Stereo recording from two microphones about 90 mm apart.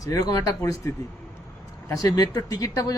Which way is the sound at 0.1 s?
40° left (ahead or behind).